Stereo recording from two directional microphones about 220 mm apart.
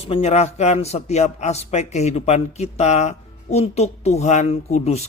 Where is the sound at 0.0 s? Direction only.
25° left (ahead or behind).